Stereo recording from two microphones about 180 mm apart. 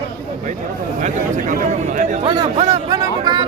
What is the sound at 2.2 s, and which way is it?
Speech, 25° right (ahead or behind).